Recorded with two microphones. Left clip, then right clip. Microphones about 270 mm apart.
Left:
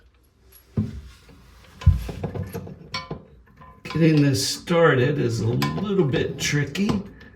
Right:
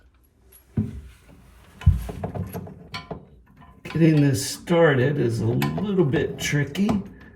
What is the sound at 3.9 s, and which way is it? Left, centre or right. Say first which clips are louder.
Speech: even; left.